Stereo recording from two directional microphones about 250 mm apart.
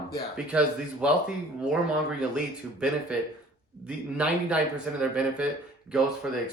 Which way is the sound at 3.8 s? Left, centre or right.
Centre.